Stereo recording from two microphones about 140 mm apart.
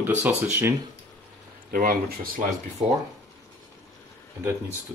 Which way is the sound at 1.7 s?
90° right.